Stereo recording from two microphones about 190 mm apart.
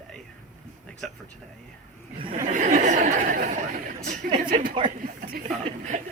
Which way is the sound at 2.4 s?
40° right (ahead or behind).